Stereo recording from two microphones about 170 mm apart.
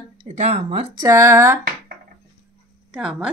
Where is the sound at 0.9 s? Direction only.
20° right (ahead or behind).